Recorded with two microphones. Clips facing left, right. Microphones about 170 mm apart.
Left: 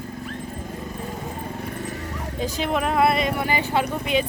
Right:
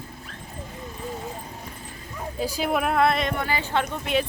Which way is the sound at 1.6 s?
70° left (ahead or behind).